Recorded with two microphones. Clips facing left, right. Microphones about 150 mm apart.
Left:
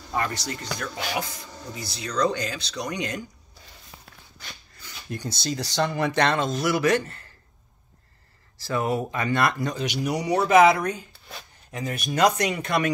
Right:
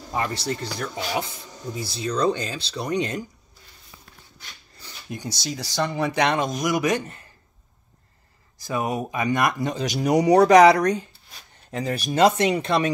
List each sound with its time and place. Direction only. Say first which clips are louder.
0.1 s speech: right 2 dB; 25° right (ahead or behind)
5.1 s speech: left 1 dB; 10° right (ahead or behind)
8.5 s speech: left 1 dB; 15° right (ahead or behind)
9.8 s speech: right 9 dB; 45° right (ahead or behind); by 12.9 s 30° right (ahead or behind)